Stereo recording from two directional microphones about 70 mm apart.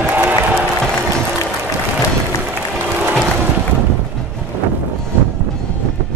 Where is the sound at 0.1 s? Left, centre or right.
Right.